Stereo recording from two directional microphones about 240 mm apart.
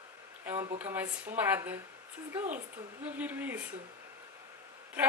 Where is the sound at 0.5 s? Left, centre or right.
Centre.